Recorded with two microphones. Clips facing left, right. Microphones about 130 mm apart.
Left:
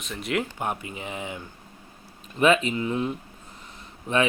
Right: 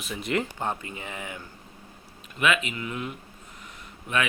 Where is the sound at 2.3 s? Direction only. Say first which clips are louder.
Left 5 dB; 35° left (ahead or behind).